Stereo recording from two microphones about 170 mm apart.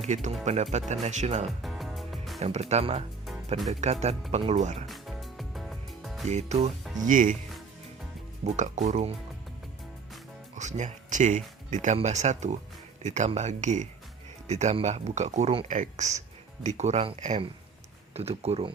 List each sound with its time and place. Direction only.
0.0 s speech: 40° right (ahead or behind)
1.6 s music: centre (ahead or behind)
2.4 s speech: 40° right (ahead or behind)
4.9 s music: centre (ahead or behind)
6.2 s speech: 40° right (ahead or behind)
8.4 s speech: 45° right (ahead or behind)
10.5 s speech: 45° right (ahead or behind)